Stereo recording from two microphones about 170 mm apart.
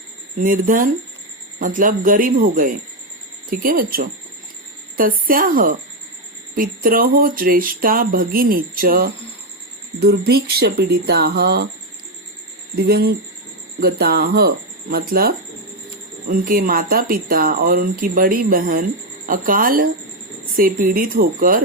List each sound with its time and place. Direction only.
0.4 s speech: 55° right (ahead or behind)
10.0 s speech: 70° right (ahead or behind)
12.7 s speech: 65° right (ahead or behind)
16.3 s speech: 55° right (ahead or behind)